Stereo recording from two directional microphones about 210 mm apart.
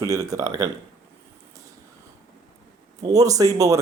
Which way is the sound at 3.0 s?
15° right (ahead or behind).